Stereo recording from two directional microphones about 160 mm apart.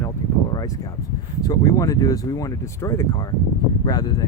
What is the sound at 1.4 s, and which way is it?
Speech, 20° left (ahead or behind).